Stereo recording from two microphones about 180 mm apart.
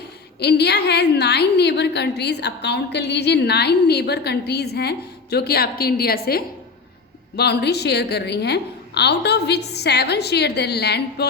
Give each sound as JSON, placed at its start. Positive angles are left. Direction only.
{"t": 0.3, "sound": "a woman's voice", "side_deg": 65}